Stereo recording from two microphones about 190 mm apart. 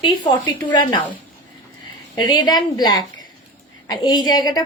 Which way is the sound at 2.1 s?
20° left (ahead or behind).